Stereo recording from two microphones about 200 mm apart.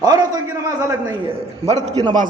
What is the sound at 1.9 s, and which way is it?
Speech, 20° right (ahead or behind).